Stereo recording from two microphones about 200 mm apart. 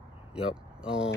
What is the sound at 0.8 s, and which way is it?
Speech, 5° right (ahead or behind).